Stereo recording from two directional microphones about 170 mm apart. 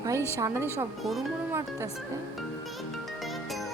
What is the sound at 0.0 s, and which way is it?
Speech, 15° right (ahead or behind).